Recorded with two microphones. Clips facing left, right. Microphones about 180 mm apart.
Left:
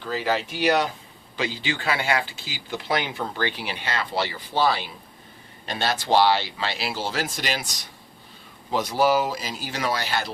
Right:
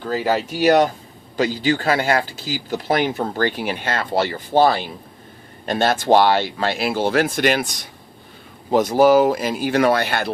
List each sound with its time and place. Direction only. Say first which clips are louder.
0.0 s speech: right 5 dB; 45° right (ahead or behind)